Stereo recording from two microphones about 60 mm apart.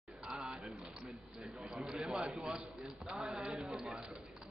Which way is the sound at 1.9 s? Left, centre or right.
Centre.